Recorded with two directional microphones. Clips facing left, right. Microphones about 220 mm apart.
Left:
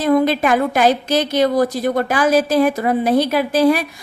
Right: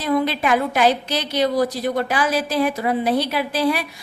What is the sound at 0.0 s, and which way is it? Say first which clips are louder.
A woman's voice: left 5 dB; 45° left (ahead or behind).